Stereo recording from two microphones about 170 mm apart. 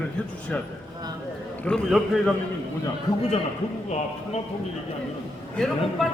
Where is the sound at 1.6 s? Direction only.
5° left (ahead or behind).